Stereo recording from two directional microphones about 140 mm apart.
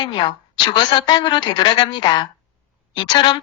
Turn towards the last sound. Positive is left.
turn(degrees=35)  # may be behind; listen again after turning